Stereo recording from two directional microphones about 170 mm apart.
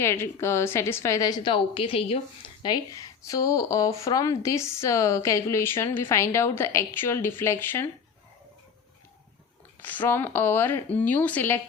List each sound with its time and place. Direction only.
0.0 s a woman's voice: 15° left (ahead or behind)
9.8 s a woman's voice: 10° left (ahead or behind)